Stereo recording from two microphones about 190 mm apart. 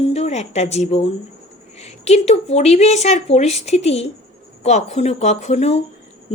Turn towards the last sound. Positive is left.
turn(degrees=35)  # may be behind; listen again after turning